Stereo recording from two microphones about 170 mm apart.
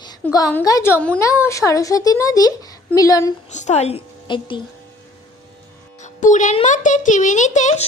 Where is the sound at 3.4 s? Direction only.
45° left (ahead or behind).